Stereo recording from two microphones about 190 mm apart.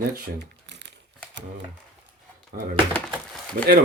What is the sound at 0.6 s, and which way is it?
Crumpling, 65° right (ahead or behind).